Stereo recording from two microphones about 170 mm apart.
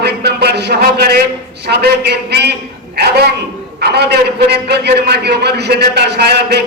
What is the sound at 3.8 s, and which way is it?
A man's voice, 75° right (ahead or behind).